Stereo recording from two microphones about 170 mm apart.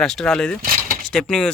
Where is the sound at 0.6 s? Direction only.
55° right (ahead or behind).